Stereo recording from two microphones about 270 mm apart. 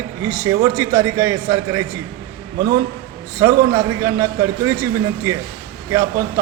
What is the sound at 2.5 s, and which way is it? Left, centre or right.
Speech, right.